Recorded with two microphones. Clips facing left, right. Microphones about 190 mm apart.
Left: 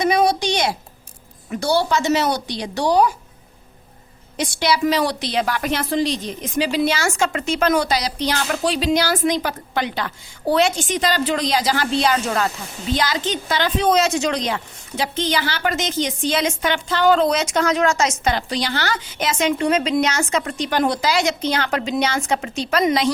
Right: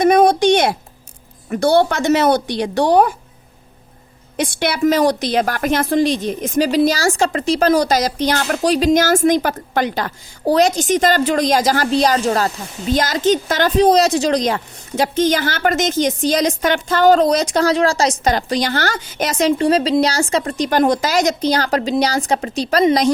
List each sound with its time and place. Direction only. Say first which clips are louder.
0.0 s a sound: right 6 dB; 50° right (ahead or behind)
1.5 s speech: right 5 dB; 55° right (ahead or behind)
4.4 s a woman's voice: right 2 dB; 55° right (ahead or behind); by 23.0 s 35° right (ahead or behind)